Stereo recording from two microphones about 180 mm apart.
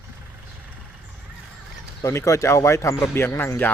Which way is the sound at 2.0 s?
15° left (ahead or behind).